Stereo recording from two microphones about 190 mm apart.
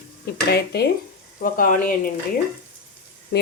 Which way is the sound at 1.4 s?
50° left (ahead or behind).